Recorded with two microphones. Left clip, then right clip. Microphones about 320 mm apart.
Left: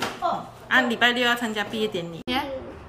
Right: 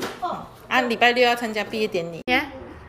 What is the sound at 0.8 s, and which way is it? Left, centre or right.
A woman's voice, left.